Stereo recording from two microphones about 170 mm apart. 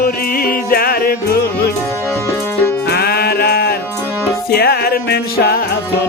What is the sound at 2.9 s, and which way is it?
Music, 70° left (ahead or behind).